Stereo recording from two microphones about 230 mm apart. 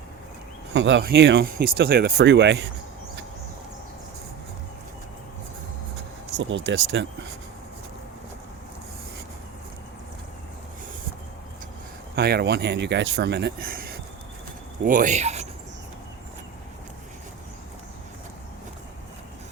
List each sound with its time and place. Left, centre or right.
0.7 s speech: right
6.4 s speech: right
12.1 s speech: right